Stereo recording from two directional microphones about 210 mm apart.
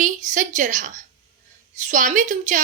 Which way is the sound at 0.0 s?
35° right (ahead or behind).